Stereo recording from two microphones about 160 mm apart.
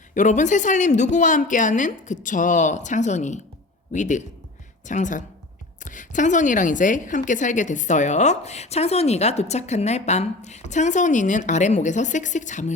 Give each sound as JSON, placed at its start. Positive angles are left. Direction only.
{"t": 0.1, "sound": "a woman's voice", "side_deg": 50}